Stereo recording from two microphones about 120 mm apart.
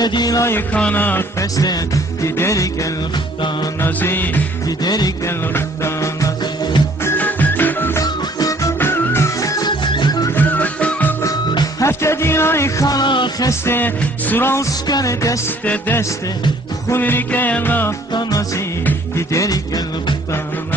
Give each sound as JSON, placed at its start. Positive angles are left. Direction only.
{"t": 0.0, "sound": "music", "side_deg": 35}
{"t": 0.5, "sound": "music", "side_deg": 15}
{"t": 1.4, "sound": "music", "side_deg": 30}
{"t": 4.6, "sound": "music", "side_deg": 35}
{"t": 5.5, "sound": "music", "side_deg": 20}
{"t": 8.0, "sound": "music", "side_deg": 30}
{"t": 8.7, "sound": "music", "side_deg": 20}
{"t": 10.3, "sound": "music", "side_deg": 15}
{"t": 11.2, "sound": "music", "side_deg": 25}
{"t": 13.5, "sound": "music", "side_deg": 20}
{"t": 15.6, "sound": "music", "side_deg": 10}
{"t": 18.1, "sound": "music", "side_deg": 30}